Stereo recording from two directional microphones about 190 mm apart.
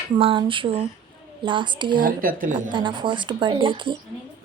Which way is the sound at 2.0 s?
50° right (ahead or behind).